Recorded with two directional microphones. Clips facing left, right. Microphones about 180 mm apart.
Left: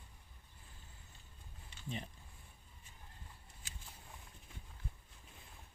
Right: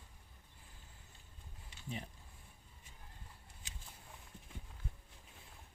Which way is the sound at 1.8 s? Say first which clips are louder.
Left 1 dB; 5° right (ahead or behind).